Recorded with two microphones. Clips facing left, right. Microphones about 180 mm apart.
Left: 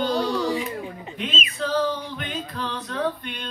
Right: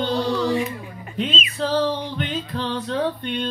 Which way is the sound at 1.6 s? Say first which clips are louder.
Right 3 dB; 30° right (ahead or behind).